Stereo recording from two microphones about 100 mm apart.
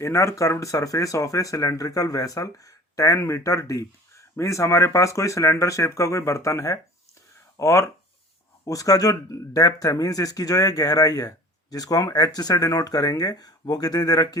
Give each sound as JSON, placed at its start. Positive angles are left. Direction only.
{"t": 0.0, "sound": "speech", "side_deg": 30}